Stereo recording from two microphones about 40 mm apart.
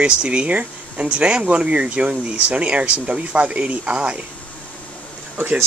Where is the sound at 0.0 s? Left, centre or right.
Right.